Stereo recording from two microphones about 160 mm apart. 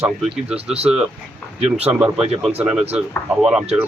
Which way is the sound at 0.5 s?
40° right (ahead or behind).